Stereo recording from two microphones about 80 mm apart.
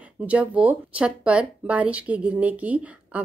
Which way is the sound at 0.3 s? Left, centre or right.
Centre.